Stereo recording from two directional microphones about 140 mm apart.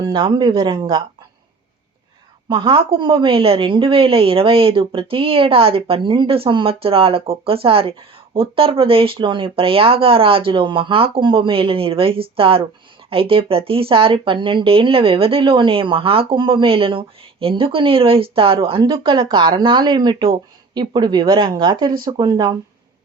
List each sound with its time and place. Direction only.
0.0 s a woman's voice: 35° right (ahead or behind)
2.5 s a woman's voice: 40° right (ahead or behind)